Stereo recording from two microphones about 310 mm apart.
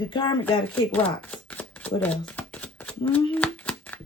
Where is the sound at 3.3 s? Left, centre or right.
Centre.